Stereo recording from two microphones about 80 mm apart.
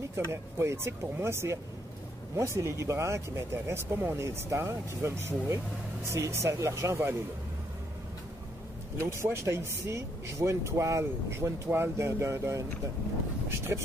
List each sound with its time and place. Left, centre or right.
0.1 s speech: right
9.0 s speech: right
13.7 s speech: right